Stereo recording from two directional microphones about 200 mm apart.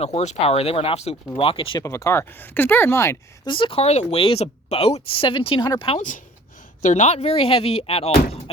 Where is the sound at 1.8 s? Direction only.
15° left (ahead or behind).